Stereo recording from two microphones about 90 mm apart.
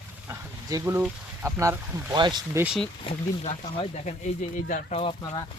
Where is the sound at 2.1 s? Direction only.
55° right (ahead or behind).